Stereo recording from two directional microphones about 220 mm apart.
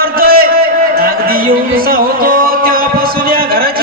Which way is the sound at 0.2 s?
40° right (ahead or behind).